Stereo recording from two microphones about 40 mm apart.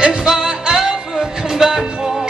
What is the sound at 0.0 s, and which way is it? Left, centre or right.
Music, centre.